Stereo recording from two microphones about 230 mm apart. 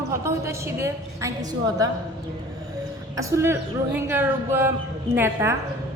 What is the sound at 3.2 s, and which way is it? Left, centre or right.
A woman's voice, centre.